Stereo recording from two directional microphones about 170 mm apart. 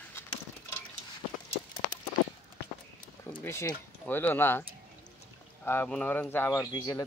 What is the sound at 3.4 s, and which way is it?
Speech, 15° left (ahead or behind).